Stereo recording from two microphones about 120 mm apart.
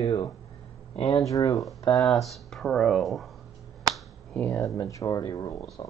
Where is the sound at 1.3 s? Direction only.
30° left (ahead or behind).